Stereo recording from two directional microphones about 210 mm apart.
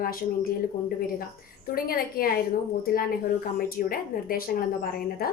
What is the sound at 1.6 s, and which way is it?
A woman's voice, 45° left (ahead or behind).